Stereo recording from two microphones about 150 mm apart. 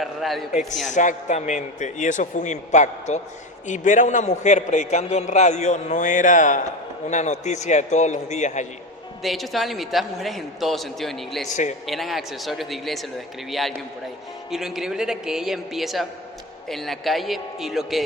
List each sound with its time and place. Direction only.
0.0 s a man's voice: centre (ahead or behind)
0.9 s a man's voice: 55° left (ahead or behind)
9.2 s a man's voice: centre (ahead or behind)